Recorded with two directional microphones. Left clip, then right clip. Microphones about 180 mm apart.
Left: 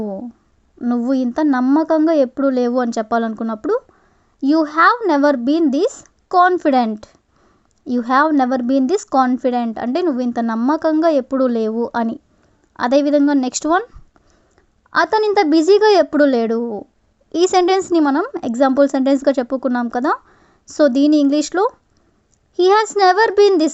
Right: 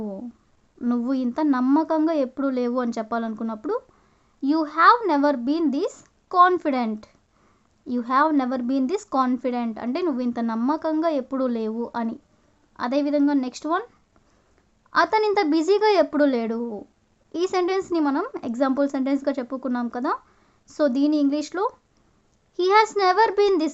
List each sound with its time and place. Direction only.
0.0 s a sound: 25° left (ahead or behind)
0.8 s a woman's voice: 25° left (ahead or behind)
14.8 s a woman's voice: 35° left (ahead or behind)